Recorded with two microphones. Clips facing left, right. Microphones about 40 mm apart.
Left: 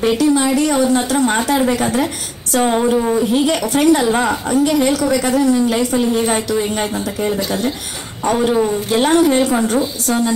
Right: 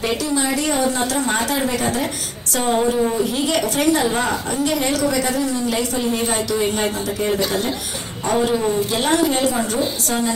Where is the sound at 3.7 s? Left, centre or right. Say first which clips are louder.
Left 6 dB; left.